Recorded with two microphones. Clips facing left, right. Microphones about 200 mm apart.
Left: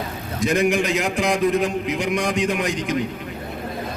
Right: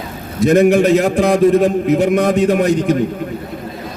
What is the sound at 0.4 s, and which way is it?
A man's voice, 40° right (ahead or behind).